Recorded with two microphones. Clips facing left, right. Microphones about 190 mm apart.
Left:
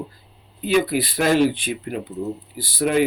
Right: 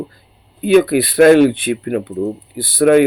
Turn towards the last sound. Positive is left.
turn(degrees=-60)  # may be behind; listen again after turning